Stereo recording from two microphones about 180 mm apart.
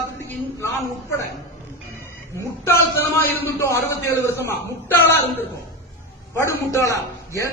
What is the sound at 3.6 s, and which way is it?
A man's voice, 15° left (ahead or behind).